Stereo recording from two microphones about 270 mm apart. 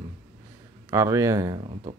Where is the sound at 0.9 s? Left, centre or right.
Centre.